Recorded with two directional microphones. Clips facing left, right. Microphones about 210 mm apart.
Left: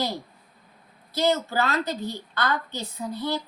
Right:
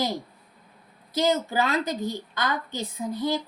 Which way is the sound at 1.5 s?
15° right (ahead or behind).